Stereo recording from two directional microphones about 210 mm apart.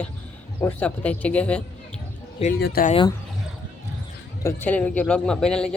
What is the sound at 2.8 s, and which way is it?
Speech, 25° left (ahead or behind).